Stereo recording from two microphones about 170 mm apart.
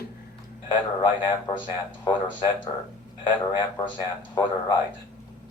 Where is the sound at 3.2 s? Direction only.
30° left (ahead or behind).